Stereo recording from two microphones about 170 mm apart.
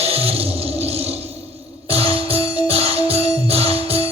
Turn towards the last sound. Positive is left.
turn(degrees=-35)  # may be behind; listen again after turning